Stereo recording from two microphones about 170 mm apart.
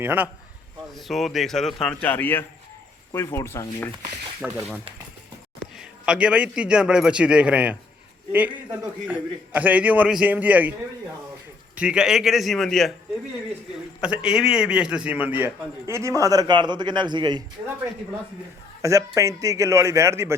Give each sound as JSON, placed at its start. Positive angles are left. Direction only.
{"t": 0.0, "sound": "a man's voice", "side_deg": -10}
{"t": 0.9, "sound": "a man's voice", "side_deg": 0}
{"t": 4.4, "sound": "a man's voice", "side_deg": -5}
{"t": 5.7, "sound": "a man's voice", "side_deg": -5}
{"t": 14.0, "sound": "a man's voice", "side_deg": -5}
{"t": 18.8, "sound": "a man's voice", "side_deg": -20}